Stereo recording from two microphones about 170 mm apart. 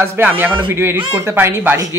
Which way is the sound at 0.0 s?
10° right (ahead or behind).